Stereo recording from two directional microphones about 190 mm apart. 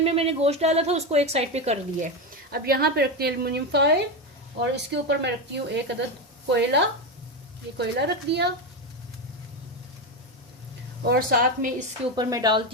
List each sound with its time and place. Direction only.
0.0 s a woman's voice: 30° right (ahead or behind)
2.5 s speech: 55° right (ahead or behind)
11.0 s speech: 55° right (ahead or behind)
12.1 s speech: 20° right (ahead or behind)